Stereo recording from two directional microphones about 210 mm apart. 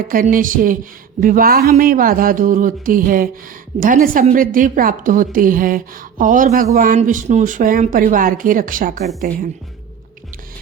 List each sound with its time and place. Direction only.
0.1 s a woman's voice: 40° right (ahead or behind)